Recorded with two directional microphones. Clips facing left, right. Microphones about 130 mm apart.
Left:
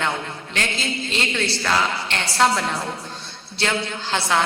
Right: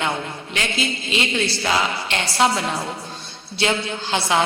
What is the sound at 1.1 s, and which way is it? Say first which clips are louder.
A woman's voice: right 2 dB; 10° right (ahead or behind).